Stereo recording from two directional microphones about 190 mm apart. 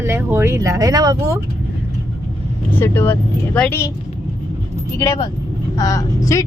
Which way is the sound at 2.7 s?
10° left (ahead or behind).